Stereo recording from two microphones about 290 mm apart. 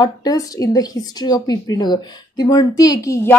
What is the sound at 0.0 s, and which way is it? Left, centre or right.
Speech, centre.